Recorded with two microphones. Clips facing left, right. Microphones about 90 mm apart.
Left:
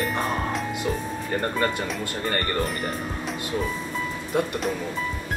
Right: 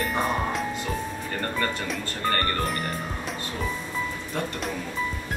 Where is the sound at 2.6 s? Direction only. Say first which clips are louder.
Left 1 dB; centre (ahead or behind).